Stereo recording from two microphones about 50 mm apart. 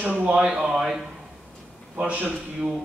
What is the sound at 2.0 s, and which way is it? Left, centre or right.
Speech, right.